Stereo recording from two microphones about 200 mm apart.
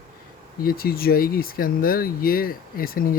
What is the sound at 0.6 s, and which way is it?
Speech, 50° left (ahead or behind).